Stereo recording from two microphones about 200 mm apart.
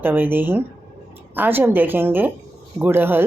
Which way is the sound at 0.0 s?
10° right (ahead or behind).